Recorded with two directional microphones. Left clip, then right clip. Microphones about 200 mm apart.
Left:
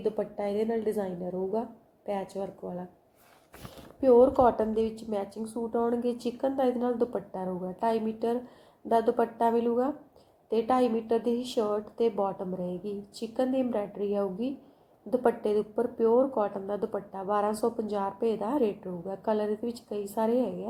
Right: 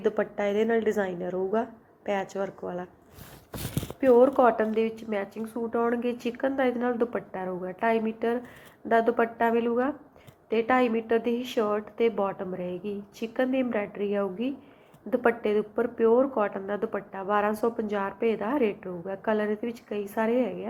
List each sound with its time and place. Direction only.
0.0 s a woman's voice: 40° right (ahead or behind)
0.5 s a woman's voice: centre (ahead or behind)
2.4 s a woman's voice: 35° right (ahead or behind)
4.0 s speech: 30° right (ahead or behind)